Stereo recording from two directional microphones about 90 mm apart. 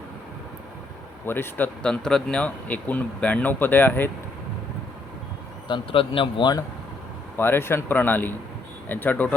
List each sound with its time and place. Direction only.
1.2 s speech: 25° left (ahead or behind)
1.8 s speech: 10° left (ahead or behind)
5.6 s speech: 70° left (ahead or behind)
7.3 s speech: 25° left (ahead or behind)